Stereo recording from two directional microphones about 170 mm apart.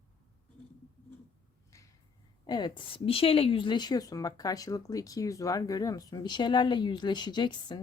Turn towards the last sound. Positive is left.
turn(degrees=25)  # may be behind; listen again after turning